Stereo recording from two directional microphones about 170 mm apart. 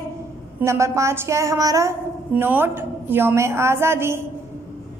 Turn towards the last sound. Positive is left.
turn(degrees=-15)  # may be behind; listen again after turning